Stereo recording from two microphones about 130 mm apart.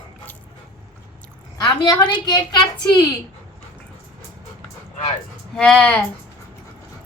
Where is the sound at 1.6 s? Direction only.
35° left (ahead or behind).